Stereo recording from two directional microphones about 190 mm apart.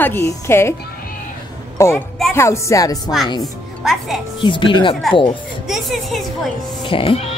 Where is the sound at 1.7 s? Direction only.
15° left (ahead or behind).